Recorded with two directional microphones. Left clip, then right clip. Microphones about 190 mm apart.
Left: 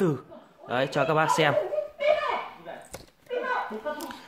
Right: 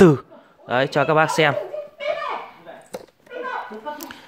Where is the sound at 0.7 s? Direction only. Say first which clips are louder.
Right 6 dB; 35° right (ahead or behind).